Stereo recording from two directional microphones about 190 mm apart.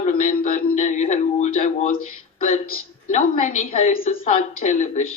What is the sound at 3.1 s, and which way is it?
Speech, 40° left (ahead or behind).